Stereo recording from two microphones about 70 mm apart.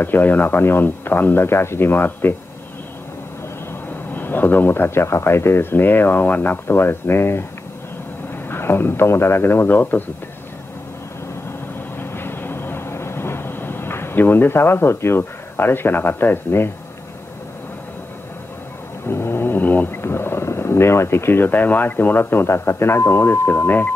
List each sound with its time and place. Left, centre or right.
0.0 s speech: left
4.1 s speech: left
8.5 s speech: left
12.0 s vehicle: left
19.0 s speech: left